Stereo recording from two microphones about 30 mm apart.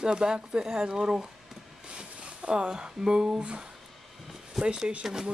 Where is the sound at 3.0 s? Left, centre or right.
Right.